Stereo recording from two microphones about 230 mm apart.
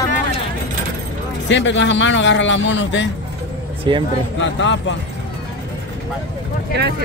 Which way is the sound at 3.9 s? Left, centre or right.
Right.